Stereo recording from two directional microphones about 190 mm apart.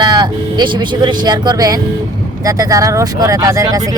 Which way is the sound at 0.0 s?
20° right (ahead or behind).